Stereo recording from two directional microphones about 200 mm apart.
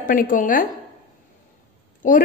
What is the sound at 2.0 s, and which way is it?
Speech, 40° left (ahead or behind).